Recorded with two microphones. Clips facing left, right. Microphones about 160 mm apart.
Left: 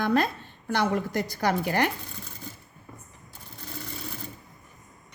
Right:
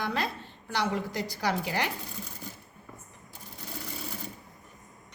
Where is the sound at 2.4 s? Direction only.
10° right (ahead or behind).